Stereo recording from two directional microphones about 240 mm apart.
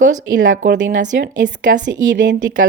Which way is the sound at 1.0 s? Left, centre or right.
Right.